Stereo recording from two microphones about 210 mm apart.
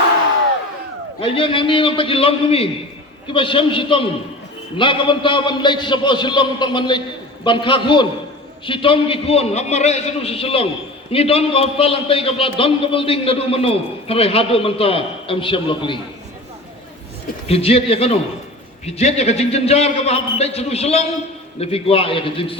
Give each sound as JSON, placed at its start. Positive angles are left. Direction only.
{"t": 1.2, "sound": "a man's voice", "side_deg": 25}
{"t": 17.5, "sound": "a man's voice", "side_deg": 30}